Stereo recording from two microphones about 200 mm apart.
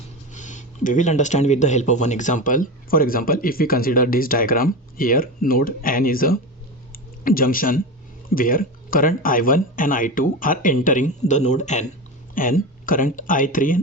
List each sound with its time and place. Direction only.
0.3 s speech: 40° left (ahead or behind)